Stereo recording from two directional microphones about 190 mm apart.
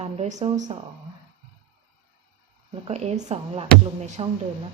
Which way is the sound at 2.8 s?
35° right (ahead or behind).